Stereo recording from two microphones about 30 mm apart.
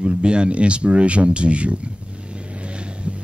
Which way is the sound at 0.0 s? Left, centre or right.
Right.